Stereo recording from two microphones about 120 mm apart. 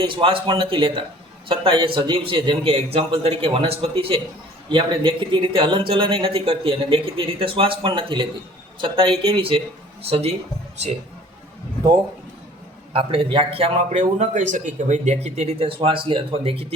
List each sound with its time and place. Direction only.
0.0 s a man's voice: 45° right (ahead or behind)
12.9 s a man's voice: 50° right (ahead or behind)